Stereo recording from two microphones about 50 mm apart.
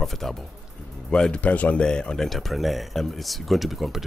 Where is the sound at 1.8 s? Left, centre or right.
Centre.